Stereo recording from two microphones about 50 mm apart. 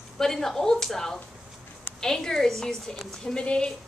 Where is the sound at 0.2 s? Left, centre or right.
Centre.